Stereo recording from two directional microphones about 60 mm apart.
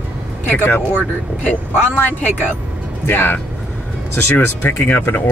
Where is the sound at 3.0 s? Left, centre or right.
Left.